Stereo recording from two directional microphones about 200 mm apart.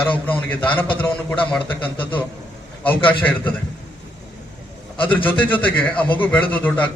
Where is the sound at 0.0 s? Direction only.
10° left (ahead or behind).